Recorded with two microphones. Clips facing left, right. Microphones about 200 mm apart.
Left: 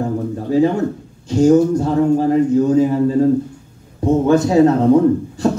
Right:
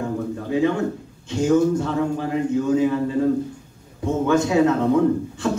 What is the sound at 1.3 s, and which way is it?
A man's voice, 40° left (ahead or behind).